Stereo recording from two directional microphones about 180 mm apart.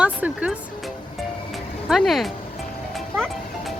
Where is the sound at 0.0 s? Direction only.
5° right (ahead or behind).